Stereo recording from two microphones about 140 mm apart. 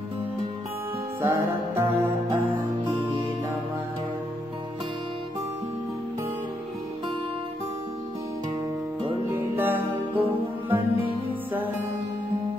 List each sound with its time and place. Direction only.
1.2 s music: 20° right (ahead or behind)
9.3 s music: 15° right (ahead or behind)